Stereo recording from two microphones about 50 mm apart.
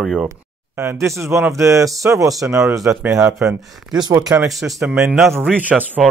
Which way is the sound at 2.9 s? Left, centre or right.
Right.